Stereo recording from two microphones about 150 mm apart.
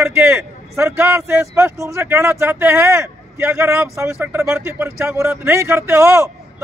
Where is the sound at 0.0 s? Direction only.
15° right (ahead or behind).